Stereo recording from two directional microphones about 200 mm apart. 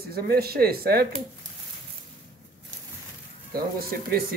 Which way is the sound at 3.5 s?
50° right (ahead or behind).